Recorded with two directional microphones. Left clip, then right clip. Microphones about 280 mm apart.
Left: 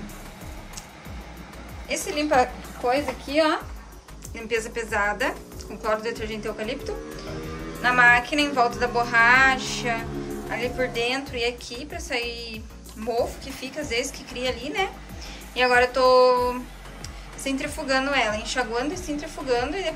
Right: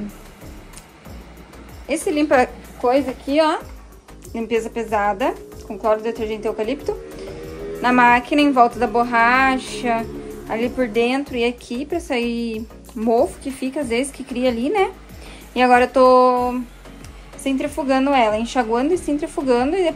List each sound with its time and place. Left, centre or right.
1.9 s a woman's voice: centre
4.4 s a woman's voice: centre